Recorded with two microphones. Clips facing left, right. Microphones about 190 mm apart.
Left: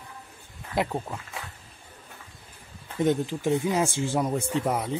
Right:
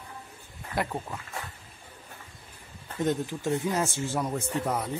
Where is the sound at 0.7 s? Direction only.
15° left (ahead or behind).